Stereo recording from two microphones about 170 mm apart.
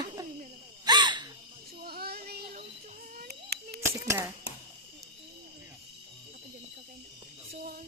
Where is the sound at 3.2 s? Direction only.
70° right (ahead or behind).